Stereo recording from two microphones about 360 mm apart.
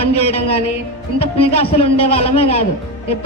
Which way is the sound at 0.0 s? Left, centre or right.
Centre.